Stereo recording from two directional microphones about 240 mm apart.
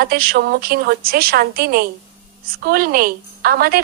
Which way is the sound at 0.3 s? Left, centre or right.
Right.